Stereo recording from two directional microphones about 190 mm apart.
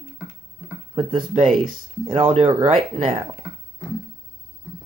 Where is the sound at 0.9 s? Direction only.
35° right (ahead or behind).